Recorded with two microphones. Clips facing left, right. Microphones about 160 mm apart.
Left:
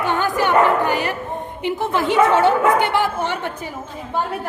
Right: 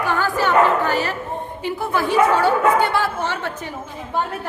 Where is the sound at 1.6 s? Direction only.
20° left (ahead or behind).